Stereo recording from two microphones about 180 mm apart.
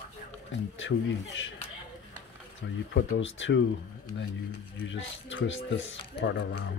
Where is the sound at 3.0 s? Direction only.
90° left.